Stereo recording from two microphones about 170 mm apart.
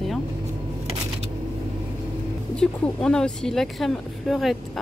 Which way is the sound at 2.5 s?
5° left (ahead or behind).